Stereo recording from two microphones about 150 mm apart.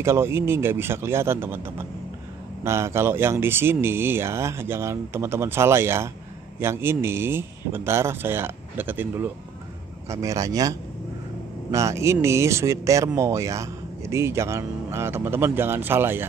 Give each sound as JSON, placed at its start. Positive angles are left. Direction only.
{"t": 0.0, "sound": "speech", "side_deg": -15}